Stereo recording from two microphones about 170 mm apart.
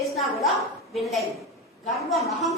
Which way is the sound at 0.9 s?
Centre (ahead or behind).